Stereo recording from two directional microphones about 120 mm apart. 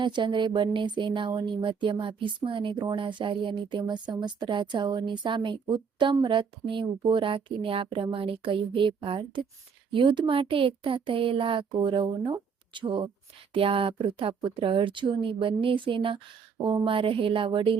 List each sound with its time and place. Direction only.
0.0 s a woman's voice: 40° right (ahead or behind)